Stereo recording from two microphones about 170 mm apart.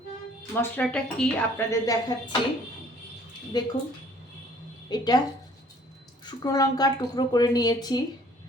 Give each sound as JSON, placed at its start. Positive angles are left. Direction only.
{"t": 0.6, "sound": "a woman's voice", "side_deg": 5}
{"t": 1.7, "sound": "a woman's voice", "side_deg": 20}
{"t": 3.5, "sound": "a woman's voice", "side_deg": 25}
{"t": 4.9, "sound": "a woman's voice", "side_deg": 25}
{"t": 6.2, "sound": "a woman's voice", "side_deg": 20}